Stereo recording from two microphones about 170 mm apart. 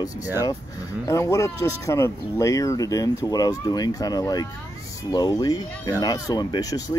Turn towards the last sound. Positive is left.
turn(degrees=20)  # may be behind; listen again after turning